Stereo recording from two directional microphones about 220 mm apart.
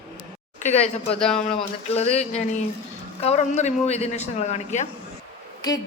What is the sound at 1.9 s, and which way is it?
A woman's voice, 30° left (ahead or behind).